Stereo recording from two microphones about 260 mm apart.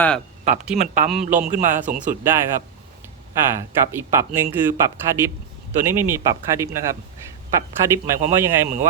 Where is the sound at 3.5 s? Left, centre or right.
Centre.